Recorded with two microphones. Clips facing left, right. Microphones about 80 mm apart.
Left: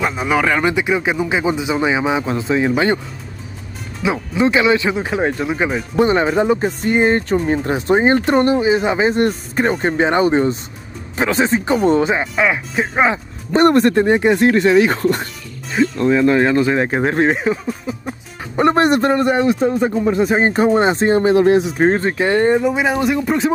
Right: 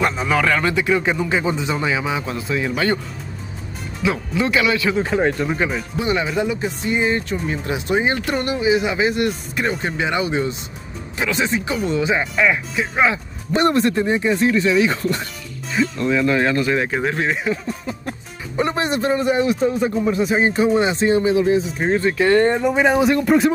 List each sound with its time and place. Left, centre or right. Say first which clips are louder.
0.0 s speech: left 1 dB; centre
4.0 s speech: left 4 dB; left
6.0 s speech: left 5 dB; left
12.2 s speech: left 1 dB; centre
12.7 s speech: left 2 dB; left
13.6 s a man's voice: left 5 dB; left
15.8 s speech: left 5 dB; left
17.0 s a man's voice: left 5 dB; left
17.6 s music: left 3 dB; centre
18.6 s a man's voice: left 7 dB; left
21.8 s a man's voice: left 2 dB; left
22.1 s speech: left 1 dB; left
22.6 s speech: right 1 dB; centre